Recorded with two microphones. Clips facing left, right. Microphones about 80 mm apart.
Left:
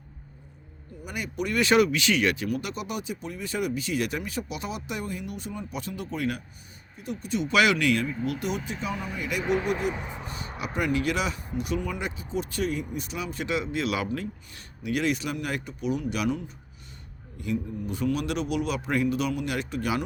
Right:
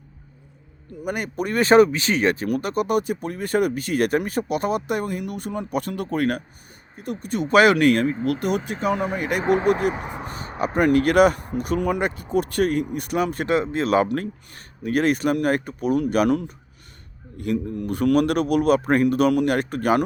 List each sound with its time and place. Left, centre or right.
1.0 s speech: right
10.8 s speech: right